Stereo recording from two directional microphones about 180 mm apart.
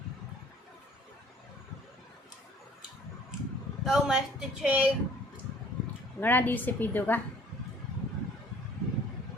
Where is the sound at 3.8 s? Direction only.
Centre (ahead or behind).